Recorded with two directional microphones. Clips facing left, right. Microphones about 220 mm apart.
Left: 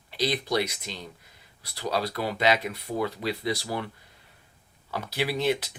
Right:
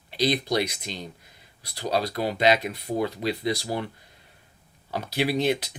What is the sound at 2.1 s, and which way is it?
Speech, 40° right (ahead or behind).